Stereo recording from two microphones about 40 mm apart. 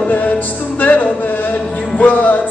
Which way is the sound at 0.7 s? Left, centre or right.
Left.